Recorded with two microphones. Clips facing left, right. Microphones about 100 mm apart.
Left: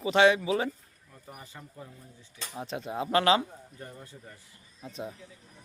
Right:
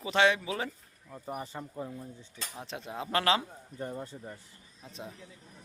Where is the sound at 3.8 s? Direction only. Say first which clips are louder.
Right 9 dB; 30° right (ahead or behind).